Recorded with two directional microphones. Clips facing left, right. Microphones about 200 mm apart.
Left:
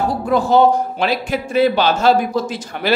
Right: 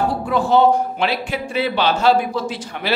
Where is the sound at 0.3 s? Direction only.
40° left (ahead or behind).